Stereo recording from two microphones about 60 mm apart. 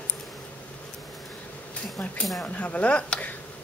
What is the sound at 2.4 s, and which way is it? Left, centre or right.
Speech, left.